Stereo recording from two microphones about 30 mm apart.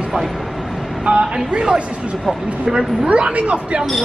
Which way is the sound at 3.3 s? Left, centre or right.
Right.